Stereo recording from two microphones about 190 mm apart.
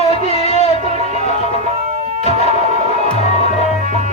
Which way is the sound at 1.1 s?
35° left (ahead or behind).